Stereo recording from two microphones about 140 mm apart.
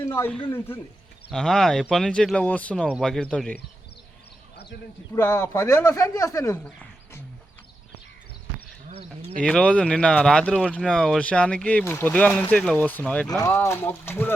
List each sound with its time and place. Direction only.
0.1 s speech: 15° left (ahead or behind)
5.1 s speech: 15° left (ahead or behind)
9.4 s speech: 5° left (ahead or behind)
13.2 s speech: 25° left (ahead or behind)